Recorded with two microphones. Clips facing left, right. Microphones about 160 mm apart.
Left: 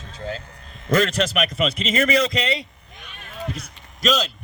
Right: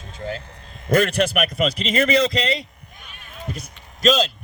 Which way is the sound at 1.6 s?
35° right (ahead or behind).